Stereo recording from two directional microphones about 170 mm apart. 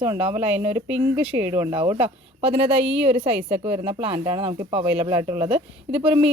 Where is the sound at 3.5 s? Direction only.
35° right (ahead or behind).